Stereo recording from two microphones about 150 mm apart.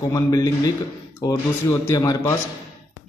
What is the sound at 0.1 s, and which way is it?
Speech, 20° left (ahead or behind).